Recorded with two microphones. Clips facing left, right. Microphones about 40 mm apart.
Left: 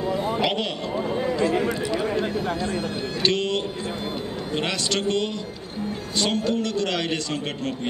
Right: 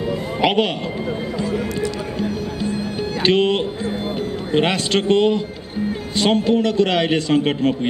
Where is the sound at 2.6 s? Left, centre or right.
Right.